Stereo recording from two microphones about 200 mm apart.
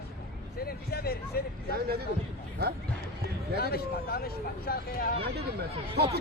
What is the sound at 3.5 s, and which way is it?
Speech, 50° left (ahead or behind).